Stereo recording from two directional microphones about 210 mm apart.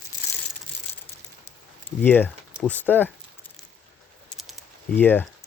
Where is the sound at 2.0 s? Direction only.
10° left (ahead or behind).